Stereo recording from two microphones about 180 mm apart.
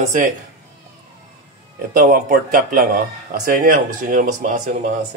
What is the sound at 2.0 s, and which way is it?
Speech, 45° right (ahead or behind).